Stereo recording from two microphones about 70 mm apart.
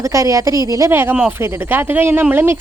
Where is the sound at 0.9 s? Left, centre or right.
Right.